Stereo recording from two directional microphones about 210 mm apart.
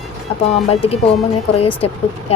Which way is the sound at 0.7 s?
30° left (ahead or behind).